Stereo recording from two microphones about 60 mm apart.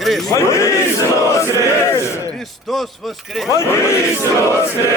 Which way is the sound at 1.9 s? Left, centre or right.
Left.